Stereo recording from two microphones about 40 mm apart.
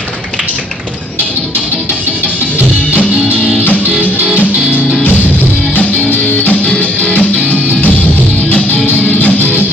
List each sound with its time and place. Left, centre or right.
4.0 s music: right
5.8 s music: left